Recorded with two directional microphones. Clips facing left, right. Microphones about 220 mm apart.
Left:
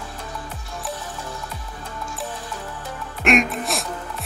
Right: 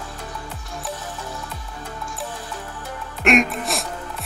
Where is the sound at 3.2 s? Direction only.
Centre (ahead or behind).